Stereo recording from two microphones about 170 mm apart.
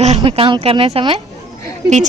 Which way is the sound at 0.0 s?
35° right (ahead or behind).